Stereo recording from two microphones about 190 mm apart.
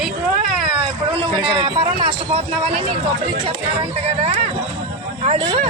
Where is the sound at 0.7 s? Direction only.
30° right (ahead or behind).